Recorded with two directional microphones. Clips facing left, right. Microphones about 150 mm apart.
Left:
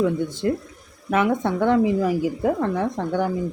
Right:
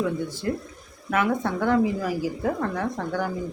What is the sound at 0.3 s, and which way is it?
Speech, 20° left (ahead or behind).